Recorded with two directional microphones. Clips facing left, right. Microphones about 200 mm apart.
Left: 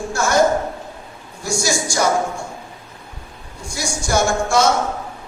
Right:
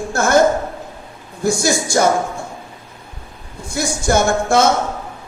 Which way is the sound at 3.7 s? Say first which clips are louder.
Right 4 dB; 55° right (ahead or behind).